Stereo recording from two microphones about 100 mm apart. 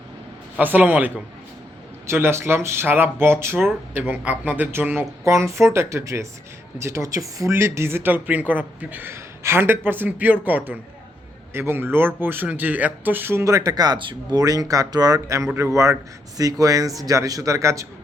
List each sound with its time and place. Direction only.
0.6 s a man's voice: 20° right (ahead or behind); by 14.2 s 50° right (ahead or behind)
14.3 s speech: 40° right (ahead or behind)